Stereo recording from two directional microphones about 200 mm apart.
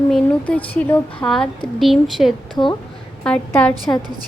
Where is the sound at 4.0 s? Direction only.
20° right (ahead or behind).